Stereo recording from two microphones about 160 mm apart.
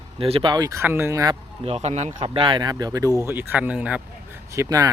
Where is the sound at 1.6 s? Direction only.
40° right (ahead or behind).